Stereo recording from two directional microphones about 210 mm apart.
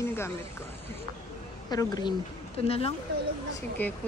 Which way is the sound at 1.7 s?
20° left (ahead or behind).